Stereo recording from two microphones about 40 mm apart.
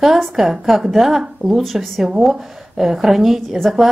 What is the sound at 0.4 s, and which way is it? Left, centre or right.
Speech, centre.